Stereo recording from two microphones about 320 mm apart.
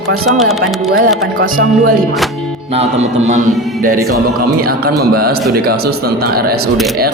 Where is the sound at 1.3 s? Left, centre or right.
Right.